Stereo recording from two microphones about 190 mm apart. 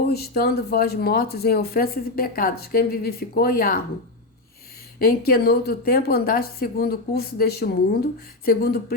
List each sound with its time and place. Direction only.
0.0 s speech: 55° left (ahead or behind)
4.9 s speech: 50° left (ahead or behind)